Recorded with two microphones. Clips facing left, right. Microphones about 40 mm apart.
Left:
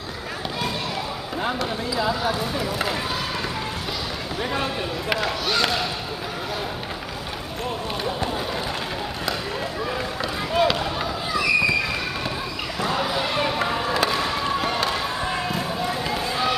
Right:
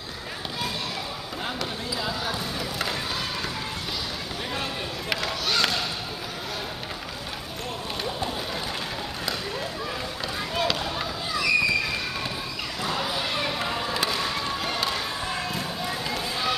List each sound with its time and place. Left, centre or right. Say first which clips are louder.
2.0 s speech: left 7 dB; centre
5.1 s speech: left 3 dB; centre
10.5 s basketball bounce: left 6 dB; centre
12.8 s a sound: left 5 dB; centre
13.7 s basketball bounce: left 5 dB; centre